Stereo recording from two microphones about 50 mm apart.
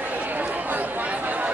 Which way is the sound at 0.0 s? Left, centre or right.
Right.